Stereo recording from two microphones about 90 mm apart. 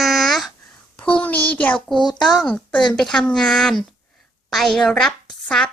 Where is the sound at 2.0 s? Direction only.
55° left (ahead or behind).